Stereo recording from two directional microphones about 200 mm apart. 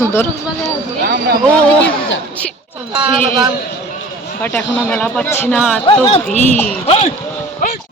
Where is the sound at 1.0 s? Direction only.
50° right (ahead or behind).